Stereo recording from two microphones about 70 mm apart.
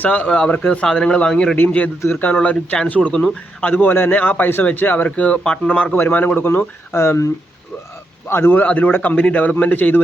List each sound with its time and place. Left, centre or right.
0.0 s speech: left
0.3 s speech: centre
1.5 s speech: left
3.6 s speech: left
8.3 s speech: left